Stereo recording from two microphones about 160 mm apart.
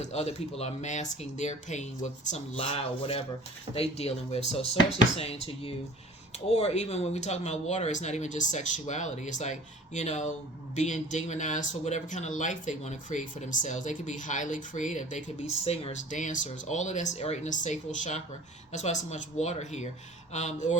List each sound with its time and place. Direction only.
0.0 s speech: 45° left (ahead or behind)